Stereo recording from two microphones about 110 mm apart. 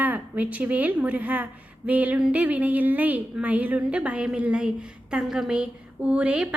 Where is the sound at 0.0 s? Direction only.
15° right (ahead or behind).